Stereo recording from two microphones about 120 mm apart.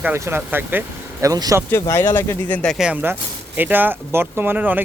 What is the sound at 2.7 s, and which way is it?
Speech, 10° right (ahead or behind).